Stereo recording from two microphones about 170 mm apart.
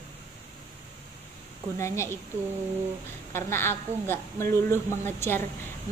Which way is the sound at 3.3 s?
15° left (ahead or behind).